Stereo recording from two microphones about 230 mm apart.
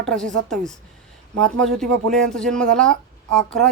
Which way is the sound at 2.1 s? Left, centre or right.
Centre.